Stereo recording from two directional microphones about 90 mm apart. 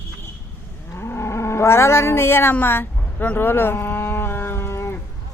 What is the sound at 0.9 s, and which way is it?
Livestock, 30° left (ahead or behind).